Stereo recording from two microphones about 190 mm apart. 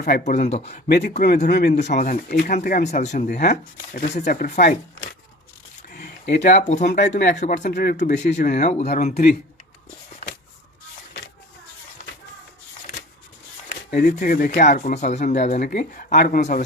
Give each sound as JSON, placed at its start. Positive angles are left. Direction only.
{"t": 0.0, "sound": "speech", "side_deg": 40}
{"t": 0.9, "sound": "speech", "side_deg": 60}
{"t": 1.7, "sound": "speech", "side_deg": 35}
{"t": 5.9, "sound": "a sound", "side_deg": 40}
{"t": 6.4, "sound": "speech", "side_deg": 40}
{"t": 13.9, "sound": "speech", "side_deg": 50}
{"t": 16.4, "sound": "speech", "side_deg": 40}